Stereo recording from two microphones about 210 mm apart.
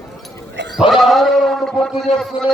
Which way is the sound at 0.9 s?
Centre (ahead or behind).